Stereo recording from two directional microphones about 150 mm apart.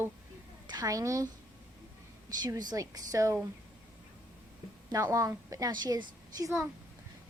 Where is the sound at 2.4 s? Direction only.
25° right (ahead or behind).